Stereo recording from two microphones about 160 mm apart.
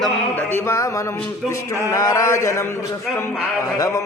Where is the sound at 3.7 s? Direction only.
20° left (ahead or behind).